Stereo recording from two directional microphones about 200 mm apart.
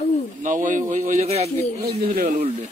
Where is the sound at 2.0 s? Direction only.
50° right (ahead or behind).